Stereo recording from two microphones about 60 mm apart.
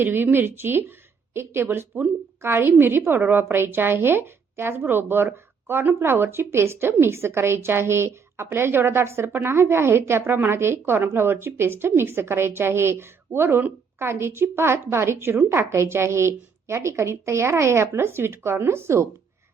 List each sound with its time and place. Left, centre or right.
0.0 s a woman's voice: right
14.1 s a woman's voice: right